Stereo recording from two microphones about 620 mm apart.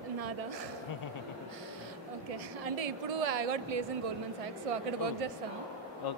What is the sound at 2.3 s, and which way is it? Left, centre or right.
A woman's voice, right.